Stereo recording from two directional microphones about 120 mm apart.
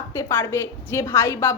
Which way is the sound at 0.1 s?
20° left (ahead or behind).